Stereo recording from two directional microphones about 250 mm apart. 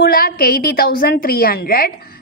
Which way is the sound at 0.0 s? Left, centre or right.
Left.